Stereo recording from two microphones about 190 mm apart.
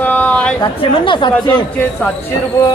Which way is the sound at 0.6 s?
25° left (ahead or behind).